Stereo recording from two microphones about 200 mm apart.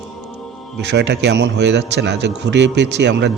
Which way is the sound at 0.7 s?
60° right (ahead or behind).